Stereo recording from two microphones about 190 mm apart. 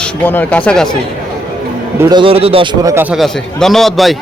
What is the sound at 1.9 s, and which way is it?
Speech, 15° right (ahead or behind).